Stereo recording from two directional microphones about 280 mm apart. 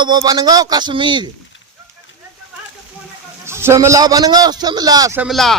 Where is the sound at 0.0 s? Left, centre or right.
Centre.